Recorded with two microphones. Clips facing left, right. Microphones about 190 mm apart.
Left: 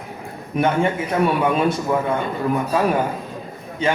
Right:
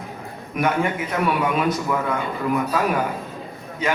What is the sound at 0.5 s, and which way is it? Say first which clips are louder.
A man's voice: left 3 dB; 30° left (ahead or behind).